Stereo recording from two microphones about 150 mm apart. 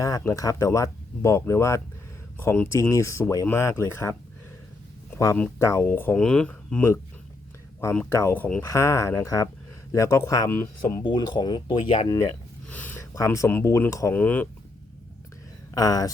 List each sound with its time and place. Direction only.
0.0 s speech: 20° left (ahead or behind)
5.1 s speech: 15° left (ahead or behind)
8.1 s speech: 15° left (ahead or behind)
8.6 s speech: 20° left (ahead or behind)
11.0 s speech: 30° left (ahead or behind)
12.0 s speech: 20° left (ahead or behind)
12.6 s speech: 10° left (ahead or behind)
15.7 s speech: 25° left (ahead or behind)